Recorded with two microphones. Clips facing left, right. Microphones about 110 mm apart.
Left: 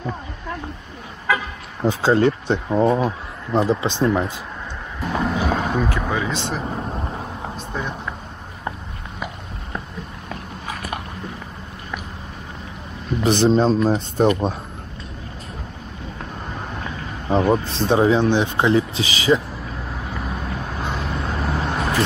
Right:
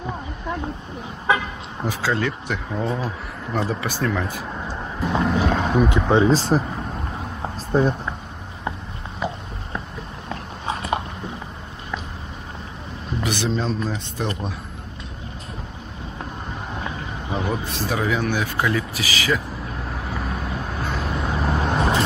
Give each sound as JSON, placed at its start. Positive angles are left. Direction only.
{"t": 1.3, "sound": "vehicle", "side_deg": -20}
{"t": 1.9, "sound": "speech", "side_deg": 25}
{"t": 5.2, "sound": "speech", "side_deg": 5}
{"t": 5.8, "sound": "speech", "side_deg": -20}
{"t": 7.5, "sound": "a sound", "side_deg": -35}
{"t": 10.7, "sound": "a sound", "side_deg": -25}
{"t": 13.2, "sound": "speech", "side_deg": 30}
{"t": 17.3, "sound": "speech", "side_deg": 35}
{"t": 19.9, "sound": "vehicle", "side_deg": 0}